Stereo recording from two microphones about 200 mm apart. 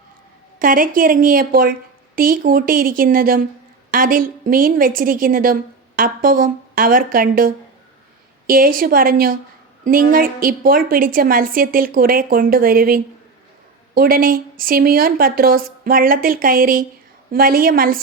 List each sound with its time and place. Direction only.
0.6 s a woman's voice: 45° right (ahead or behind)